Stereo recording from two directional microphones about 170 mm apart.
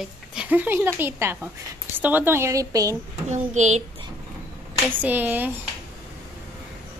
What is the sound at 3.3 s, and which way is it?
Speech, 45° right (ahead or behind).